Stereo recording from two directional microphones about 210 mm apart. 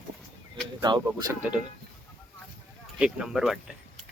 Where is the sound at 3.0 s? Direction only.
5° right (ahead or behind).